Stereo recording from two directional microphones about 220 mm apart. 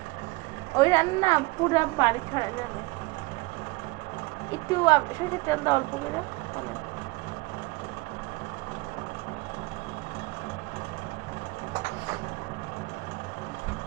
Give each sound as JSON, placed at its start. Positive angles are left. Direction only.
{"t": 0.8, "sound": "a woman's voice", "side_deg": 15}
{"t": 4.5, "sound": "a woman's voice", "side_deg": 15}